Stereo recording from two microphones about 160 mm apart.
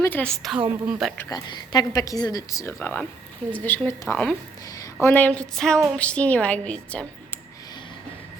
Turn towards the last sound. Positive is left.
turn(degrees=10)  # may be behind; listen again after turning